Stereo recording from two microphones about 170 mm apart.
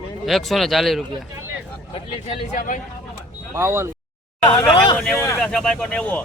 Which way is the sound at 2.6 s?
50° left (ahead or behind).